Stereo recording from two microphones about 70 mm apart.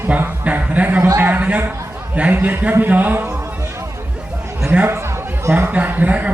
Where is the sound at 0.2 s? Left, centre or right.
Right.